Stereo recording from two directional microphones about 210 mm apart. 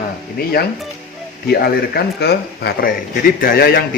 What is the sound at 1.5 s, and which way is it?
Speech, 50° left (ahead or behind).